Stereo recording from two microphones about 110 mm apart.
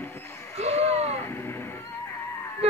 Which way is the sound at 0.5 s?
70° right (ahead or behind).